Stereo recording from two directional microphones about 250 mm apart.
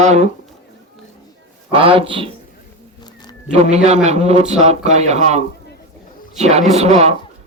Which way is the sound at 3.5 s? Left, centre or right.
Right.